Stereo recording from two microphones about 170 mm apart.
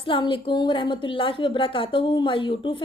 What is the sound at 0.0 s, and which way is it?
A woman's voice, 30° left (ahead or behind).